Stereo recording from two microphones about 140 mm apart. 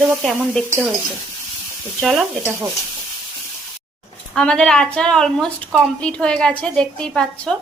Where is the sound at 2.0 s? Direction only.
Centre (ahead or behind).